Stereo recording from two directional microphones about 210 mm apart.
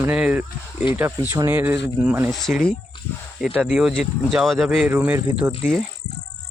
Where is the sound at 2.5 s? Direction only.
40° left (ahead or behind).